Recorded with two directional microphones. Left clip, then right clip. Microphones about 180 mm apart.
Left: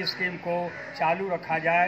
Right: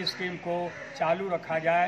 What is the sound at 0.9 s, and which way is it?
Speech, centre (ahead or behind).